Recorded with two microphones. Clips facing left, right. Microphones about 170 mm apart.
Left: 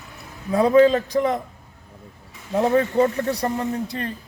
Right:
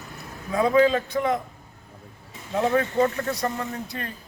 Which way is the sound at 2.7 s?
30° left (ahead or behind).